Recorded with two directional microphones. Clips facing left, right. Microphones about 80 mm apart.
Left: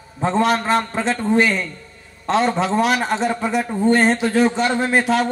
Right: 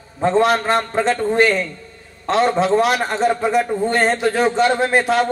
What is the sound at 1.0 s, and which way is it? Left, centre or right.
Speech, centre.